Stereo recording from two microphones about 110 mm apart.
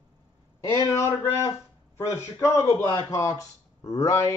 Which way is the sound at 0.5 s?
25° left (ahead or behind).